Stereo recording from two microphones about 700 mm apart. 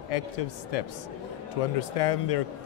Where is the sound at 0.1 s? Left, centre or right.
Left.